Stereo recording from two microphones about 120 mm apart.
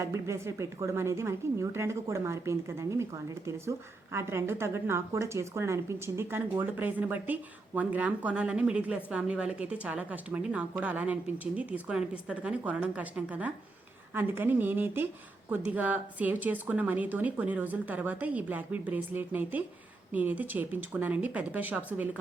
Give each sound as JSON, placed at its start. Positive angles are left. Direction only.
{"t": 0.0, "sound": "a woman's voice", "side_deg": -25}